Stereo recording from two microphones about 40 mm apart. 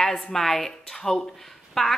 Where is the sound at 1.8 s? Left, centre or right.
Centre.